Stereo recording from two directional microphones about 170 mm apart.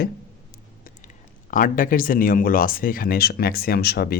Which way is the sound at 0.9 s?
50° left (ahead or behind).